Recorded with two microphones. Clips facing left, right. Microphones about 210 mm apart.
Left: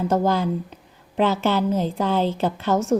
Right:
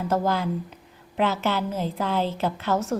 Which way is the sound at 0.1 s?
30° left (ahead or behind).